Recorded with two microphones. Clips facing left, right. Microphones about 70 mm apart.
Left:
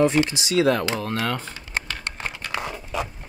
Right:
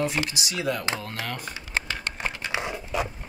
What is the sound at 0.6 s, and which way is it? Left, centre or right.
Speech, left.